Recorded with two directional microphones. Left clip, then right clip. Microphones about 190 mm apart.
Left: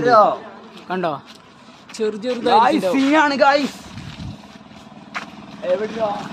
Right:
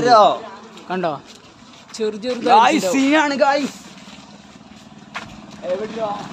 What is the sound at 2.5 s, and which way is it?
Speech, 20° right (ahead or behind).